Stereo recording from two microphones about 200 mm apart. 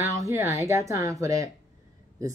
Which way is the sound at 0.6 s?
15° right (ahead or behind).